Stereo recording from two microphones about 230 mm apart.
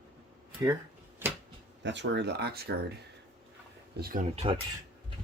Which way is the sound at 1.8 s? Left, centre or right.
Right.